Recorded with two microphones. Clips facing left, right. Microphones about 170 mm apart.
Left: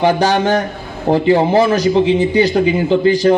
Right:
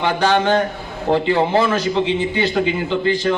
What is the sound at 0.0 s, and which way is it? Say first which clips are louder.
A man's voice: left 4 dB; 40° left (ahead or behind).